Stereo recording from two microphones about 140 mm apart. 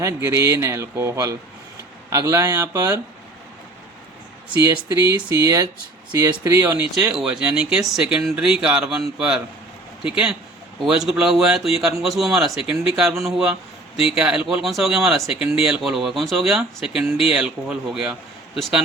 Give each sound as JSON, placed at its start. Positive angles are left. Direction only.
{"t": 0.0, "sound": "speech", "side_deg": -20}
{"t": 4.9, "sound": "speech", "side_deg": -25}
{"t": 7.0, "sound": "speech", "side_deg": -5}